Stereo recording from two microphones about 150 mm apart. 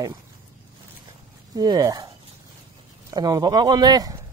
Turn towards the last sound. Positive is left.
turn(degrees=-25)  # may be behind; listen again after turning